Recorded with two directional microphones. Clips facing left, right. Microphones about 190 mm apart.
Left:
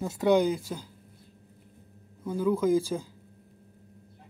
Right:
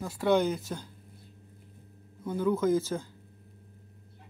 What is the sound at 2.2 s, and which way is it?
Speech, 10° left (ahead or behind).